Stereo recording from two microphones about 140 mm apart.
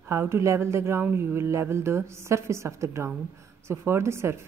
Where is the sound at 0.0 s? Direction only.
15° right (ahead or behind).